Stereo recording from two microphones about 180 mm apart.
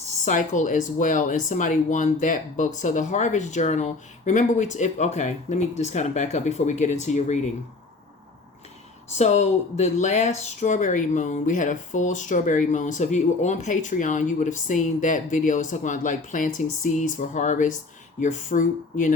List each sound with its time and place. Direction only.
0.3 s speech: 45° left (ahead or behind)
9.1 s speech: 40° left (ahead or behind)